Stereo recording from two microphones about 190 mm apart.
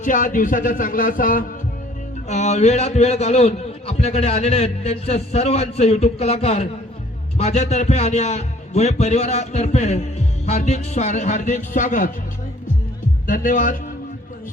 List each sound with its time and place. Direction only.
0.0 s a man's voice: 45° left (ahead or behind)
13.2 s a man's voice: 45° left (ahead or behind)